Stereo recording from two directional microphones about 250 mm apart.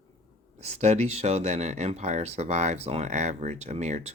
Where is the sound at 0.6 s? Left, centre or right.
Right.